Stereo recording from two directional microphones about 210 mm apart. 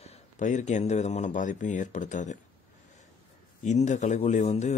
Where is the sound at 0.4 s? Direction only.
35° left (ahead or behind).